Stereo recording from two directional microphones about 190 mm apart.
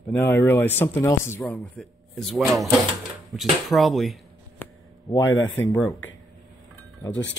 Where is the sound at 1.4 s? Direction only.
Centre (ahead or behind).